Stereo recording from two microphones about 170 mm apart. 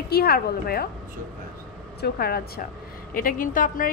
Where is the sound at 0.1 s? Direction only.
65° left (ahead or behind).